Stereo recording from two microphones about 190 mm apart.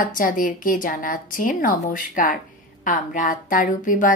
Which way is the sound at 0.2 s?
45° left (ahead or behind).